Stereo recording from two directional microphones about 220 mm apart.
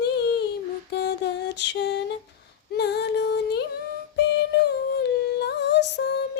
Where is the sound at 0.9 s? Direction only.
50° left (ahead or behind).